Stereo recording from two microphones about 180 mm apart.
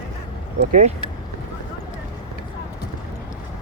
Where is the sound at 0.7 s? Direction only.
40° right (ahead or behind).